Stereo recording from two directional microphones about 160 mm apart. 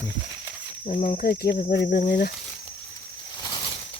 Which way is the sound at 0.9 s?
55° left (ahead or behind).